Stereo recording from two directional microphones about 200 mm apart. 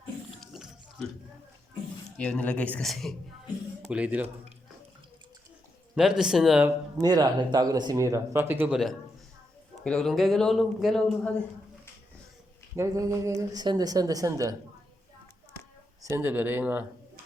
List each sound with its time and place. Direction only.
0.3 s biting: centre (ahead or behind)
2.1 s a man's voice: 5° left (ahead or behind)
5.9 s a man's voice: 5° right (ahead or behind)
6.7 s a man's voice: 20° right (ahead or behind); by 11.4 s 5° left (ahead or behind)
12.7 s speech: 15° right (ahead or behind)
16.0 s speech: 10° right (ahead or behind)